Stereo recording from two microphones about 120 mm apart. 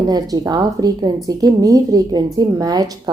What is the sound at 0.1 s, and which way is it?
A woman's voice, 30° right (ahead or behind).